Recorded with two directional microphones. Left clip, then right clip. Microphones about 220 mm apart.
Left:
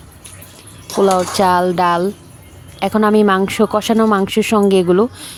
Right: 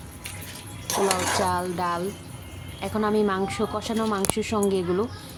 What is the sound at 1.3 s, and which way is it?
Speech, 40° left (ahead or behind).